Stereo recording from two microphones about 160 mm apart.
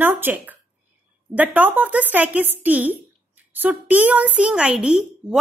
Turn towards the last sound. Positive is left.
turn(degrees=-5)  # may be behind; listen again after turning